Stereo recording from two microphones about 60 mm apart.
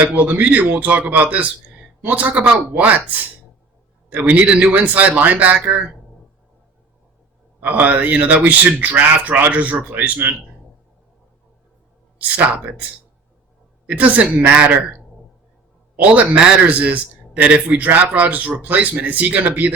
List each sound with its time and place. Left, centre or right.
0.0 s a man's voice: centre
4.1 s a man's voice: right
7.6 s a man's voice: right
12.4 s a man's voice: right
13.8 s a man's voice: right